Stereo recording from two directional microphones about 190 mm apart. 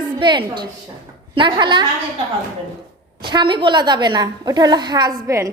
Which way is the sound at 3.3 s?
25° right (ahead or behind).